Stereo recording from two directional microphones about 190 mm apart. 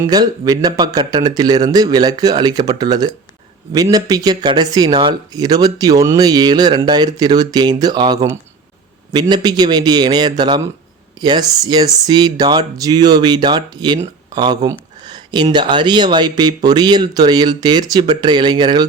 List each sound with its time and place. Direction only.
0.0 s speech: 20° right (ahead or behind)
9.3 s speech: 20° right (ahead or behind)